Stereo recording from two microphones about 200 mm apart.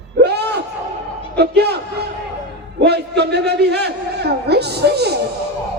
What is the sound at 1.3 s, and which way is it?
Speech, 55° right (ahead or behind).